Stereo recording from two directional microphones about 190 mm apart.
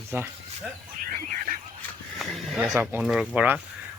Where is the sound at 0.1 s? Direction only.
10° right (ahead or behind).